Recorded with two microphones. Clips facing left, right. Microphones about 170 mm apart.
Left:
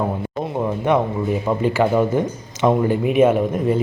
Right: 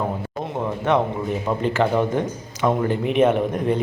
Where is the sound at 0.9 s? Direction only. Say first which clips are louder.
Left 1 dB; 10° left (ahead or behind).